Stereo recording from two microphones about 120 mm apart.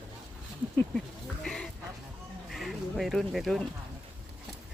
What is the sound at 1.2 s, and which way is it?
Speech, 5° left (ahead or behind).